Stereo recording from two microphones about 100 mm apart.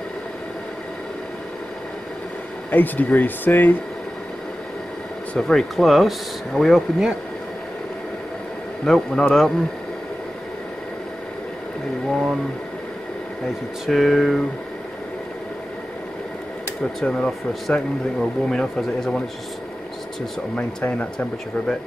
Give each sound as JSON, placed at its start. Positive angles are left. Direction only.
{"t": 2.7, "sound": "speech", "side_deg": 20}
{"t": 5.3, "sound": "speech", "side_deg": 5}
{"t": 8.8, "sound": "speech", "side_deg": 5}
{"t": 12.1, "sound": "speech", "side_deg": -5}
{"t": 13.8, "sound": "speech", "side_deg": 0}
{"t": 17.1, "sound": "speech", "side_deg": 5}
{"t": 20.5, "sound": "speech", "side_deg": 15}